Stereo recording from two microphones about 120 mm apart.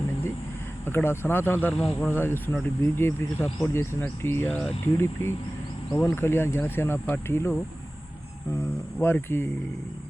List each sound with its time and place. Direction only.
0.9 s speech: 20° left (ahead or behind)
1.7 s speech: centre (ahead or behind)
2.0 s speech: 20° left (ahead or behind)
5.9 s speech: 20° left (ahead or behind)
8.5 s speech: 20° left (ahead or behind)